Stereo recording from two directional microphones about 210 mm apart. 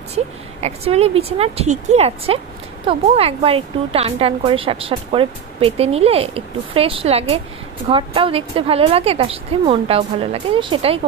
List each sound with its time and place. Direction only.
0.1 s speech: 30° right (ahead or behind)